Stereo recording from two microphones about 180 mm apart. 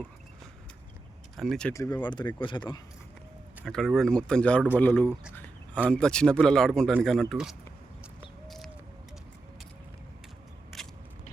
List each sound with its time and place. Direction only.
1.4 s speech: 5° left (ahead or behind)
1.7 s speech: 15° left (ahead or behind)
3.6 s speech: 5° left (ahead or behind)
8.4 s a sound: centre (ahead or behind)
10.7 s biting: centre (ahead or behind)